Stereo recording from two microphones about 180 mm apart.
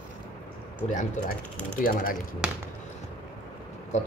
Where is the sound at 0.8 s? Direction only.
45° left (ahead or behind).